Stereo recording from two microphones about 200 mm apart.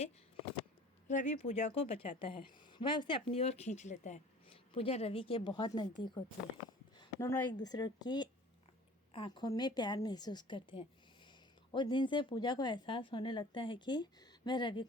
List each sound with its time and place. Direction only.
1.0 s speech: 35° left (ahead or behind)
7.0 s a sound: 15° left (ahead or behind)
7.6 s speech: 20° left (ahead or behind)